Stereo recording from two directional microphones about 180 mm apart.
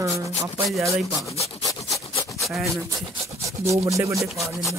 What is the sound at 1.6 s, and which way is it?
Rub, 20° left (ahead or behind).